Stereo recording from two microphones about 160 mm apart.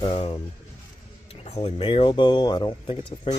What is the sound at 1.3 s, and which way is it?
Speech, 40° left (ahead or behind).